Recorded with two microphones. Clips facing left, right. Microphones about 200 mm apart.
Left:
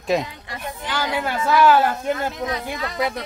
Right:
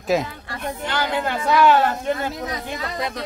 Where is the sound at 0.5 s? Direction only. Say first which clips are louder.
Right 2 dB; 10° left (ahead or behind).